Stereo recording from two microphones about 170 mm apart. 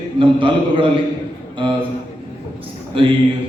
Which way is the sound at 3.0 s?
30° right (ahead or behind).